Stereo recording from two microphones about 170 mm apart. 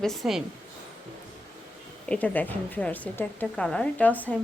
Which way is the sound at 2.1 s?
10° left (ahead or behind).